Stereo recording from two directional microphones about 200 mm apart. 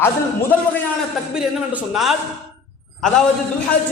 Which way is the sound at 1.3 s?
5° right (ahead or behind).